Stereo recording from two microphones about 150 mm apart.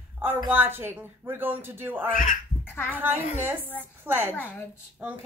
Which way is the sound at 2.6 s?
10° left (ahead or behind).